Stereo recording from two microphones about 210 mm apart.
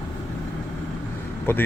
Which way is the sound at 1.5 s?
10° left (ahead or behind).